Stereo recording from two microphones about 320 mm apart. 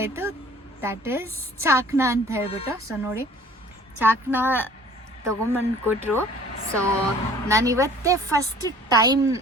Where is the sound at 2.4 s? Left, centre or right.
Centre.